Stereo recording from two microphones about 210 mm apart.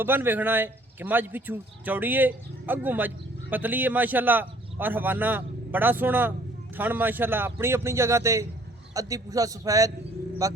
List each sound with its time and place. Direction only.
0.0 s a man's voice: 10° right (ahead or behind)